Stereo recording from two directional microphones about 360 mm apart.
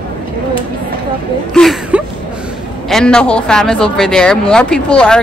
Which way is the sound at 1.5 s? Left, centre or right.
Centre.